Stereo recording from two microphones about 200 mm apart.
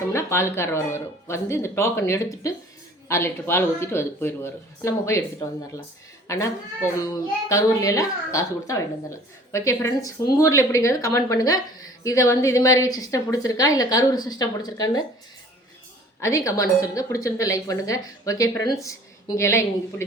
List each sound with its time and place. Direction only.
0.1 s a woman's voice: 15° left (ahead or behind)
16.2 s a woman's voice: 15° left (ahead or behind)